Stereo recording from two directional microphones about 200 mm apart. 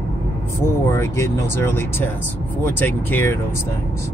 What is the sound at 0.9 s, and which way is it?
Speech, 10° left (ahead or behind).